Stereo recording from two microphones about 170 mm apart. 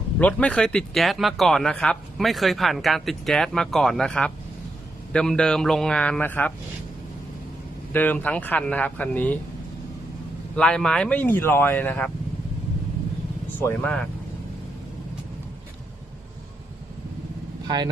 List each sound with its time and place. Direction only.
0.2 s speech: 10° left (ahead or behind)
7.9 s speech: 10° left (ahead or behind)
10.5 s speech: 5° left (ahead or behind)
13.6 s speech: 10° left (ahead or behind)
17.7 s speech: 25° right (ahead or behind)